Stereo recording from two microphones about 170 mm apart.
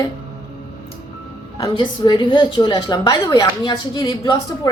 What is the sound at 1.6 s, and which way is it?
A woman's voice, 25° left (ahead or behind).